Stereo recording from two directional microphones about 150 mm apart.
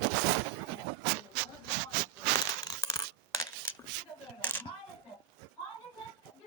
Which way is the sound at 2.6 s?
25° left (ahead or behind).